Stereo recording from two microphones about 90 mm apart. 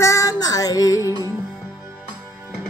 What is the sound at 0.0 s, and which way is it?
Music, 35° left (ahead or behind).